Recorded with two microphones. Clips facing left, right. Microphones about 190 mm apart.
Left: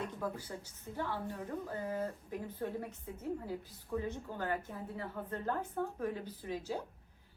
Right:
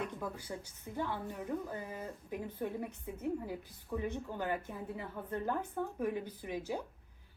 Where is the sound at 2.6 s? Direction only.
15° right (ahead or behind).